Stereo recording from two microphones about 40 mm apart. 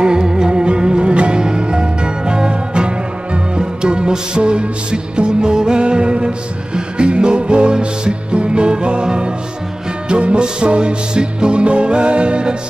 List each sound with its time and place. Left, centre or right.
0.0 s music: centre